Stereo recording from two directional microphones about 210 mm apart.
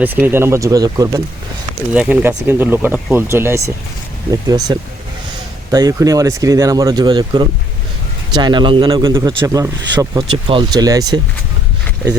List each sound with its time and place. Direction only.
0.0 s a man's voice: 10° right (ahead or behind)